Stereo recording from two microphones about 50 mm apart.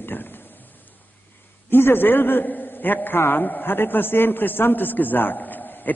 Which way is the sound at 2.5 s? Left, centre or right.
Left.